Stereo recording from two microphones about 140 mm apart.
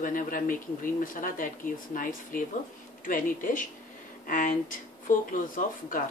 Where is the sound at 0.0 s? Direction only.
80° left.